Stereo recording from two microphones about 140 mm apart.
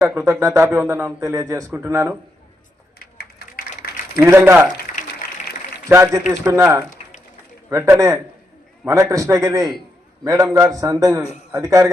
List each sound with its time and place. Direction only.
0.1 s a man's voice: 20° right (ahead or behind)
3.0 s a sound: 90° left
4.2 s a man's voice: 15° right (ahead or behind)
5.9 s a man's voice: 20° right (ahead or behind)